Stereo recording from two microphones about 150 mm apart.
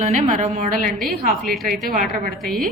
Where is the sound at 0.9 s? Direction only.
Centre (ahead or behind).